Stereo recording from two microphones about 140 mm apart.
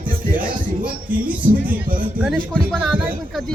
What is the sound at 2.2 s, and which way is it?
Music, 90° right.